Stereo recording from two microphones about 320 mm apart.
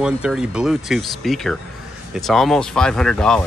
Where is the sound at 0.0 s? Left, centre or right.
Centre.